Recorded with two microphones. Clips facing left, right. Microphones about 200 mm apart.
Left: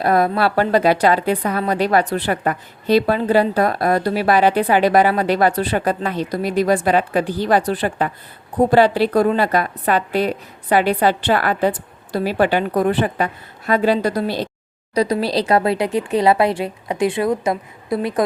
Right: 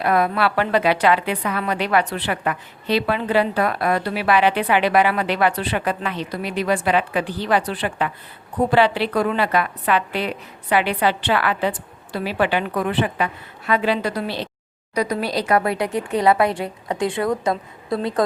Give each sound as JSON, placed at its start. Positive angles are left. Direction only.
{"t": 0.0, "sound": "a woman's voice", "side_deg": 40}